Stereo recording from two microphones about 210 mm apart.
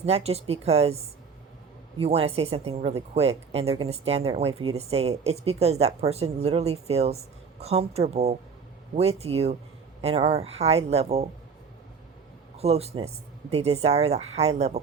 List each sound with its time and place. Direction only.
0.0 s speech: 30° right (ahead or behind)
2.0 s speech: 30° right (ahead or behind)
12.5 s speech: 30° right (ahead or behind)